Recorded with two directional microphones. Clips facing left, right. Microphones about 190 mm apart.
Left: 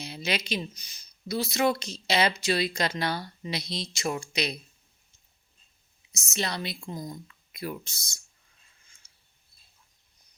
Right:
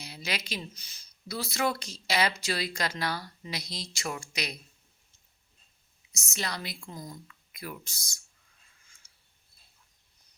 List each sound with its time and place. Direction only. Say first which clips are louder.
0.0 s speech: left 5 dB; 25° left (ahead or behind)
6.1 s speech: left 4 dB; 20° left (ahead or behind)